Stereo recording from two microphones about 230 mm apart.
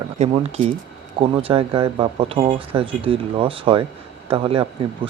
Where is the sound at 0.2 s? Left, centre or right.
Right.